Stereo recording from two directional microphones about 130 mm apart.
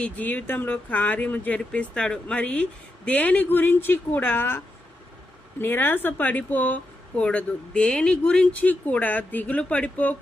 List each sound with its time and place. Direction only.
0.0 s speech: 15° left (ahead or behind)